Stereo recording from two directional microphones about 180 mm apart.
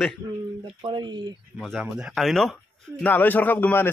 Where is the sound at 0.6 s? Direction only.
25° right (ahead or behind).